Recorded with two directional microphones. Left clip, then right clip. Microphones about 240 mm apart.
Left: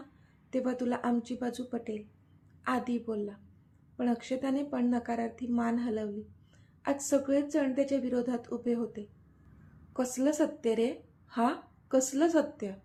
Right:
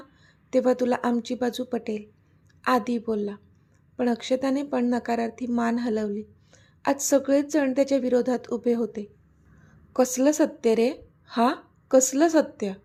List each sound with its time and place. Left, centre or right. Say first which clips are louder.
0.5 s a woman's voice: right 10 dB; right